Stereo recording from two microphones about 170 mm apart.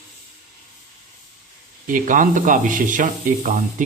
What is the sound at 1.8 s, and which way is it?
Speech, 50° right (ahead or behind).